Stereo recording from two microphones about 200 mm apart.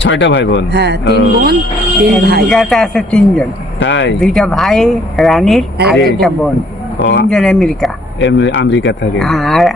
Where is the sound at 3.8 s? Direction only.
65° left (ahead or behind).